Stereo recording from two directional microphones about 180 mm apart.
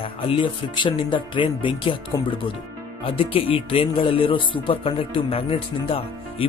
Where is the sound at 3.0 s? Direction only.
30° left (ahead or behind).